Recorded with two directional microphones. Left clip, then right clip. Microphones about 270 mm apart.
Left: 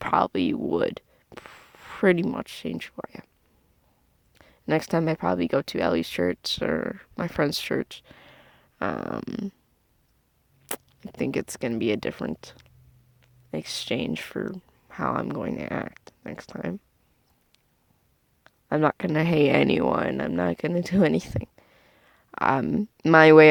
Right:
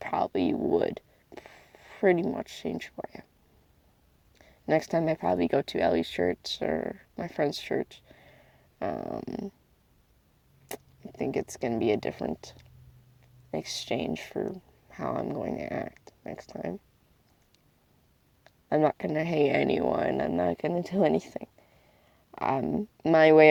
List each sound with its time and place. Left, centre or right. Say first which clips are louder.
0.0 s speech: left 5 dB; left
4.4 s speech: left 1 dB; left
10.7 s speech: left 4 dB; left
18.4 s speech: left 2 dB; left